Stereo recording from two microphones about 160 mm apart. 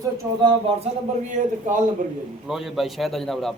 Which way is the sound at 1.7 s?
55° right (ahead or behind).